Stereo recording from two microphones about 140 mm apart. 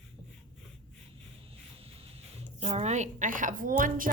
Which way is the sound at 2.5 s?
50° right (ahead or behind).